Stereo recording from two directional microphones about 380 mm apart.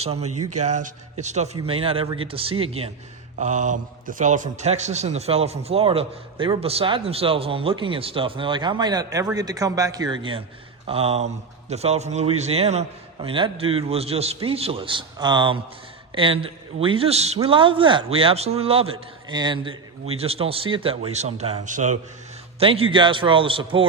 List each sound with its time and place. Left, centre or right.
0.0 s a man's voice: centre
0.3 s speech: right
0.6 s a man's voice: centre